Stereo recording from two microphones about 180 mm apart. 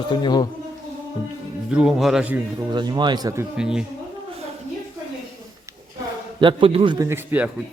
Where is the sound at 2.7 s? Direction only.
25° right (ahead or behind).